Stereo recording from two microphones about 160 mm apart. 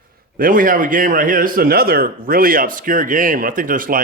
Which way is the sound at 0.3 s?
60° right (ahead or behind).